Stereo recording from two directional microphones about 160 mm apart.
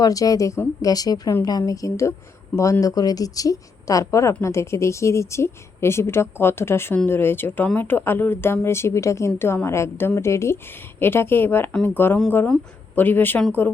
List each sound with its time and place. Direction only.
0.0 s a woman's voice: 20° left (ahead or behind)